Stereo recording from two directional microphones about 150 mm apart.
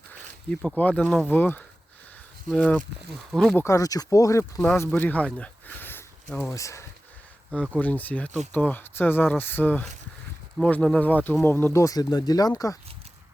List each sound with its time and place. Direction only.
0.1 s speech: 5° left (ahead or behind)
3.5 s speech: 20° left (ahead or behind)
4.6 s speech: 10° left (ahead or behind)
7.5 s speech: 10° left (ahead or behind); by 12.7 s 25° left (ahead or behind)